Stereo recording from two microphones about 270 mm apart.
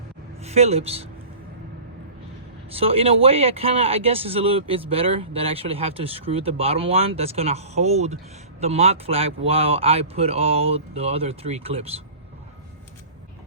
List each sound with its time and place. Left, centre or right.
0.4 s speech: right
2.7 s speech: right